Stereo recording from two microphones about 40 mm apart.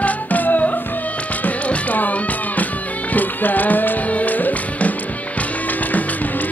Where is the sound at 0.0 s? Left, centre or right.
Left.